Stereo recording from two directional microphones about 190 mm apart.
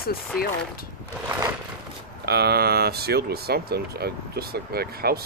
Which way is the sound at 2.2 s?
55° right (ahead or behind).